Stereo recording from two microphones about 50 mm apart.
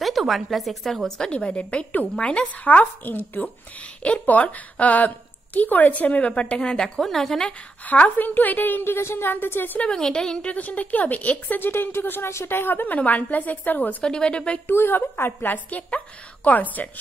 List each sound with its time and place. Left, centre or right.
0.0 s a woman's voice: centre
1.0 s a woman's voice: centre
1.3 s a woman's voice: left
2.6 s speech: left
6.4 s a woman's voice: centre
7.0 s a woman's voice: centre
7.8 s speech: left
9.9 s a woman's voice: centre
10.4 s speech: left
11.6 s a woman's voice: left
14.0 s a woman's voice: centre
14.7 s a woman's voice: left
15.5 s speech: left